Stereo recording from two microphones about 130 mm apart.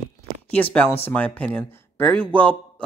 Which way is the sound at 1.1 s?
10° left (ahead or behind).